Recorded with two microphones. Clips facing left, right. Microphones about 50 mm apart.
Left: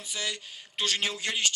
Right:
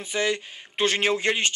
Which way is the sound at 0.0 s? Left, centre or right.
Right.